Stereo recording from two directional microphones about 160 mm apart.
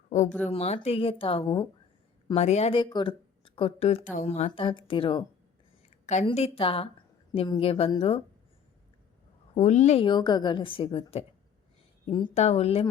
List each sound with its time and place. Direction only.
0.1 s a woman's voice: 50° left (ahead or behind); by 5.2 s 30° left (ahead or behind)
6.1 s a woman's voice: 45° left (ahead or behind)
9.6 s a woman's voice: 45° left (ahead or behind)
10.1 s a woman's voice: 30° left (ahead or behind)
12.3 s a woman's voice: 45° left (ahead or behind)